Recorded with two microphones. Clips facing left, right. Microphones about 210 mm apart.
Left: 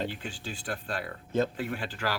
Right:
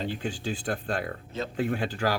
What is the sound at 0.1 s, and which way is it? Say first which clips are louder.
Speech: right 7 dB; 50° right (ahead or behind).